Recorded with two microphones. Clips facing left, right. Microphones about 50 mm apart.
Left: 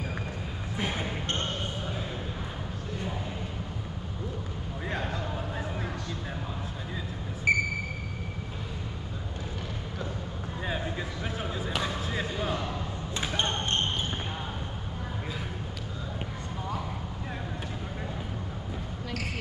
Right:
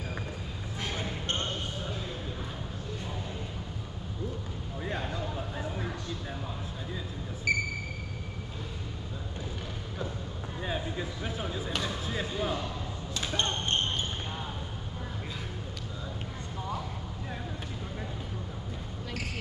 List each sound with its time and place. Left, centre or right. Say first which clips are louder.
0.7 s a sound: left 4 dB; left
7.5 s sonar: left 4 dB; centre
13.1 s basketball bounce: left 1 dB; centre